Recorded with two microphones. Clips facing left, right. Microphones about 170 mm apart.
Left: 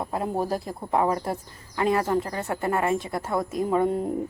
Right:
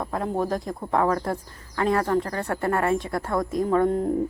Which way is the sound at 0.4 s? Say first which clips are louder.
Right 1 dB; 10° left (ahead or behind).